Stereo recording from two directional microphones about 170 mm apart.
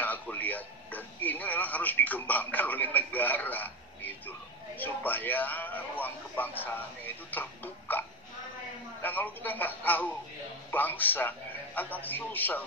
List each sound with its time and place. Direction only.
0.0 s radio: 10° left (ahead or behind)
9.0 s a man's voice: 10° left (ahead or behind)